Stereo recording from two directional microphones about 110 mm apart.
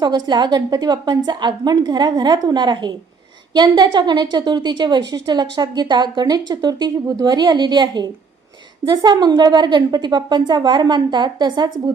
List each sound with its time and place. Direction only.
0.0 s a woman's voice: 40° right (ahead or behind)